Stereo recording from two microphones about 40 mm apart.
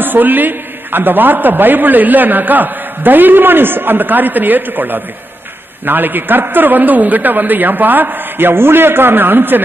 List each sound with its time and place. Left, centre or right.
0.0 s a man's voice: right